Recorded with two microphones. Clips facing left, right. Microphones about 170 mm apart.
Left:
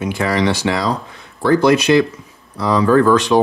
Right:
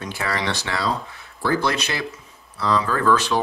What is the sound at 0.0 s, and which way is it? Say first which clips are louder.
Speech: left 9 dB; 15° left (ahead or behind).